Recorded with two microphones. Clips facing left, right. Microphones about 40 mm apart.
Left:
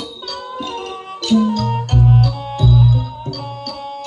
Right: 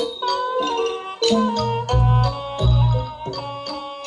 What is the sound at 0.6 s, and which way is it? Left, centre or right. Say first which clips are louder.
Music: right 4 dB; right.